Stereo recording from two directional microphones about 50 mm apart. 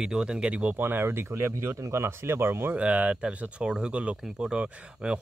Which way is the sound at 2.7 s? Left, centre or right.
Right.